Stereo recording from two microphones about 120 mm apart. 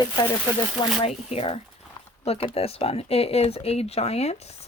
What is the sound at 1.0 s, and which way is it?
Speech, 55° left (ahead or behind).